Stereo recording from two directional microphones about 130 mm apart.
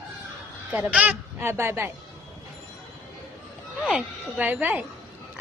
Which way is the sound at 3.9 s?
10° right (ahead or behind).